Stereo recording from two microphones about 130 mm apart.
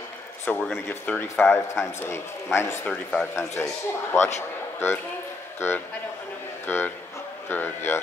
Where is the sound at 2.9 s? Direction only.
5° left (ahead or behind).